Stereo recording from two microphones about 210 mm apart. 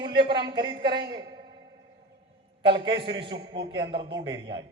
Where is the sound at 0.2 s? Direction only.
20° right (ahead or behind).